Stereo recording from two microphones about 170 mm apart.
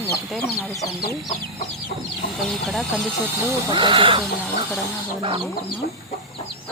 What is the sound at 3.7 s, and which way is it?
Speech, 30° right (ahead or behind).